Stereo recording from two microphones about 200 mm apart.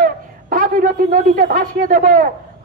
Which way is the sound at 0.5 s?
45° right (ahead or behind).